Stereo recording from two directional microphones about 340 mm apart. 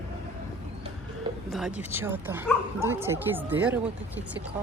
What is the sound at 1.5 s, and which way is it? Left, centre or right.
Speech, centre.